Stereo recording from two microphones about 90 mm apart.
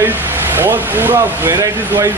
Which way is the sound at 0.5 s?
20° right (ahead or behind).